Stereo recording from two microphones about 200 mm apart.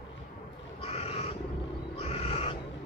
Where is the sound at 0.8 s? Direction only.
30° left (ahead or behind).